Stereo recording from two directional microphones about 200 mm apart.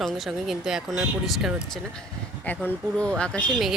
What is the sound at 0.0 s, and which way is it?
Speech, centre (ahead or behind).